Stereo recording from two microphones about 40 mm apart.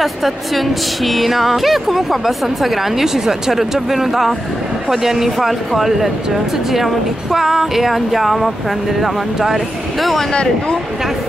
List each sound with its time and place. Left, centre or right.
0.0 s speech: centre
10.3 s speech: left